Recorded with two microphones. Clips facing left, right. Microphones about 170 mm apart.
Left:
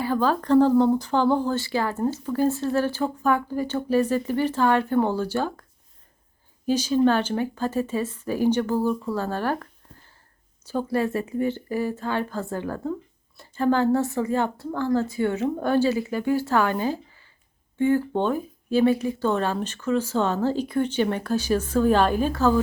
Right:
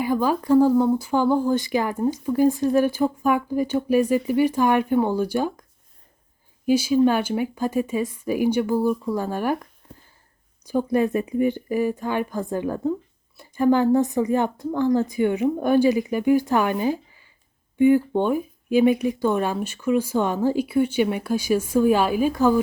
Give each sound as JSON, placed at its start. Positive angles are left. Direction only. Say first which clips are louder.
{"t": 0.0, "sound": "speech", "louder": "right 1 dB", "side_deg": -15}
{"t": 6.7, "sound": "speech", "louder": "right 2 dB", "side_deg": -10}
{"t": 10.7, "sound": "speech", "louder": "right 4 dB", "side_deg": -15}